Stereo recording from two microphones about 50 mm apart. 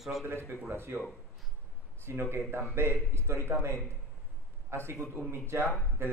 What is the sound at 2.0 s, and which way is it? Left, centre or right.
Speech, right.